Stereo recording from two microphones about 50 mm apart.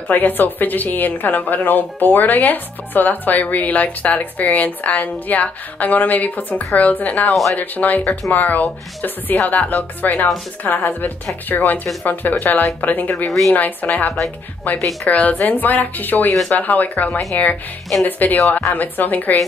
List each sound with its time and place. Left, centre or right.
0.1 s a woman's voice: left
8.0 s a woman's voice: left